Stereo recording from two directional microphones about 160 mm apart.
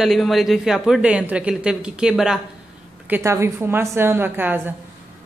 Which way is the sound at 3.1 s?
15° right (ahead or behind).